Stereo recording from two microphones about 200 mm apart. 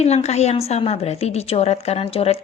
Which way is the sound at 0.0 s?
30° left (ahead or behind).